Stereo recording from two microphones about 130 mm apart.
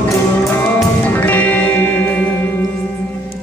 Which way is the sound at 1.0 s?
15° left (ahead or behind).